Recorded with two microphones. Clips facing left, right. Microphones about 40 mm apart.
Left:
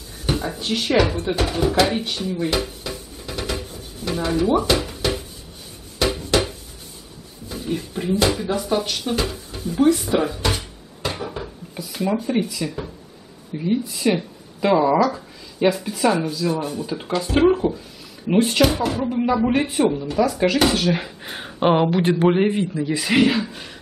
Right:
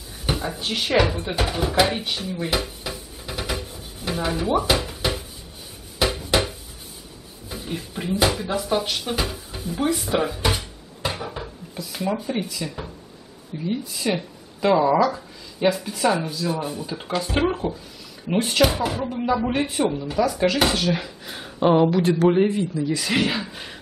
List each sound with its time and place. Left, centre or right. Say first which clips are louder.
0.3 s speech: left 2 dB; centre
5.9 s a sound: left 1 dB; centre
7.4 s speech: left 5 dB; centre
19.0 s speech: left 5 dB; centre
21.2 s a sound: left 3 dB; left
21.5 s speech: even; left
22.9 s speech: left 8 dB; centre